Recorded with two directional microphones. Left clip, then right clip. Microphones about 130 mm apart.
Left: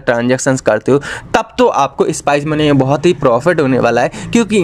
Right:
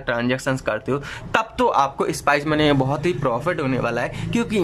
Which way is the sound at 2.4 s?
15° left (ahead or behind).